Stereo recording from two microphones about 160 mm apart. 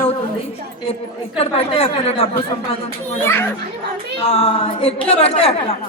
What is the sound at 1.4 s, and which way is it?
A man's voice, 40° left (ahead or behind).